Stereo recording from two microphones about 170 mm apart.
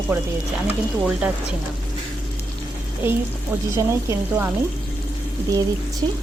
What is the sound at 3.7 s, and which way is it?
Frying, 15° right (ahead or behind).